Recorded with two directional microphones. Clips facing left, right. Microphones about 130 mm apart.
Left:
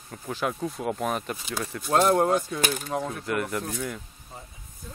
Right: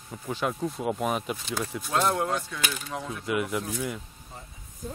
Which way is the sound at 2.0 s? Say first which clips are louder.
Left 5 dB; 40° left (ahead or behind).